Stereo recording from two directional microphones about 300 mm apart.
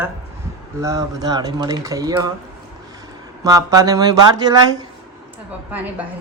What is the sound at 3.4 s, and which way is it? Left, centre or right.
Speech, centre.